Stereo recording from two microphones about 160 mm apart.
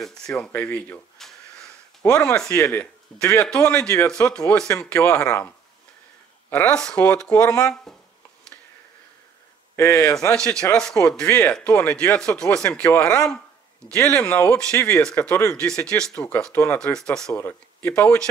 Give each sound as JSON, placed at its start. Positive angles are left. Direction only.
{"t": 0.5, "sound": "speech", "side_deg": 10}
{"t": 6.5, "sound": "speech", "side_deg": 5}
{"t": 9.8, "sound": "speech", "side_deg": 15}
{"t": 10.3, "sound": "speech", "side_deg": 5}